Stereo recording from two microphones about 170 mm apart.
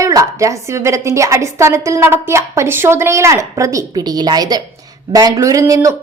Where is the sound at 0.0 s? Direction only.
20° right (ahead or behind).